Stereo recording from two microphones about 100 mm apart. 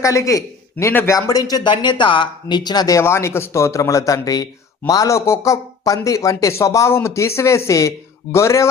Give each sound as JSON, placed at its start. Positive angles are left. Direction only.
{"t": 0.0, "sound": "a man's voice", "side_deg": 30}